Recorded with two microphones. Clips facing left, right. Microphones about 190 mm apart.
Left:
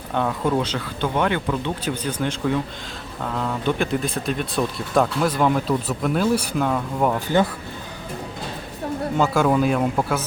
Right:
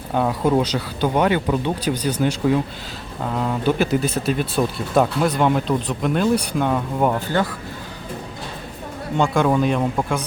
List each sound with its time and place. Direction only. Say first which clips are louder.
0.1 s speech: right 3 dB; 10° right (ahead or behind)
0.6 s speech: right 3 dB; 40° right (ahead or behind)
1.1 s speech: right 3 dB; 15° right (ahead or behind); by 6.7 s 5° left (ahead or behind)
6.7 s speech: right 2 dB; 5° right (ahead or behind)
9.1 s speech: right 1 dB; 5° left (ahead or behind)